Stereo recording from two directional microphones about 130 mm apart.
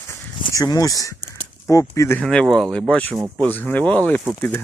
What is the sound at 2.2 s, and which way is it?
Speech, 5° left (ahead or behind).